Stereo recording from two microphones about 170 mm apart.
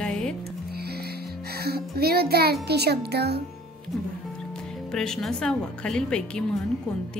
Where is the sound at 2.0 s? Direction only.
65° right (ahead or behind).